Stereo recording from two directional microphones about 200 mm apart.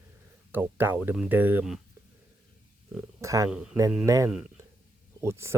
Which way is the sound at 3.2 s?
15° right (ahead or behind).